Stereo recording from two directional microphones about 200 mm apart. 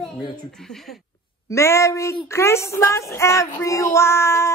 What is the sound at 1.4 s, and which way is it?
Speech, 15° left (ahead or behind).